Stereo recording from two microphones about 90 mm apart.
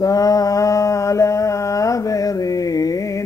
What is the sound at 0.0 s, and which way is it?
Mantra, 40° left (ahead or behind).